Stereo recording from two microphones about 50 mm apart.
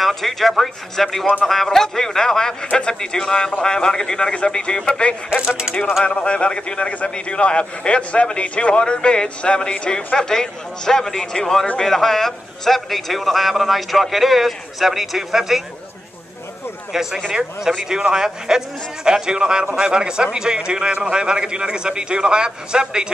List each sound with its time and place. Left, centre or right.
0.0 s a man's voice: centre
5.3 s a man's voice: centre
6.0 s a man's voice: left; by 15.6 s centre
16.9 s a man's voice: centre